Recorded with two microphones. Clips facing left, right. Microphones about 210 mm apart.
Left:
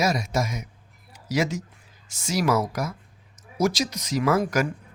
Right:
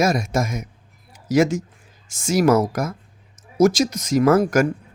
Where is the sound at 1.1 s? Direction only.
50° right (ahead or behind).